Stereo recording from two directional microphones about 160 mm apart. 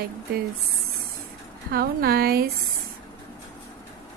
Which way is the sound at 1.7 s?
70° right (ahead or behind).